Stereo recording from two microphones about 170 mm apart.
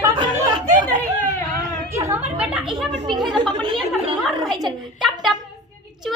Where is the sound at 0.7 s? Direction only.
45° right (ahead or behind).